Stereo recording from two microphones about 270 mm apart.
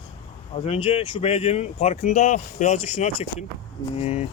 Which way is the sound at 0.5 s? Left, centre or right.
Left.